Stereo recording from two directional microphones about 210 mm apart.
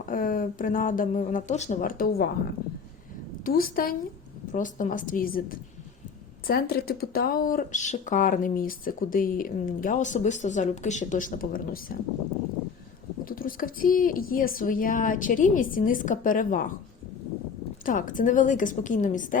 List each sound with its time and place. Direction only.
0.0 s speech: 40° left (ahead or behind)
3.4 s a woman's voice: 45° left (ahead or behind)
13.2 s speech: 40° left (ahead or behind)
17.8 s speech: 40° left (ahead or behind)